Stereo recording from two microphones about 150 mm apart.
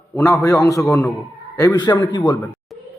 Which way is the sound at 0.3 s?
20° left (ahead or behind).